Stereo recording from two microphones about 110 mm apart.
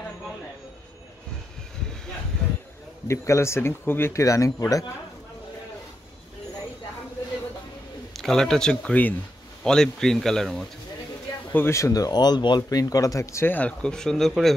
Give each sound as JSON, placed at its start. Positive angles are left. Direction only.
{"t": 3.1, "sound": "speech", "side_deg": 25}
{"t": 8.2, "sound": "speech", "side_deg": 5}
{"t": 11.5, "sound": "speech", "side_deg": 25}